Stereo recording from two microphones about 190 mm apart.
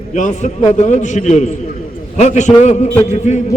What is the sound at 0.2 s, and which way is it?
A man's voice, 40° left (ahead or behind).